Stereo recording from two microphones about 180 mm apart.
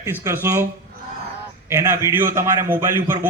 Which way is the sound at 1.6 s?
15° right (ahead or behind).